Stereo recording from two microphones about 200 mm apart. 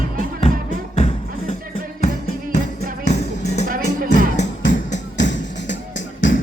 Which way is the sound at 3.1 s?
35° left (ahead or behind).